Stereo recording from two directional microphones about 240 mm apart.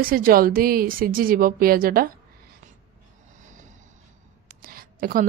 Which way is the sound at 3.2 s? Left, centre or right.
Right.